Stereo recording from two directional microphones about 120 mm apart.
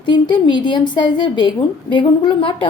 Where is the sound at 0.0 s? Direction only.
40° left (ahead or behind).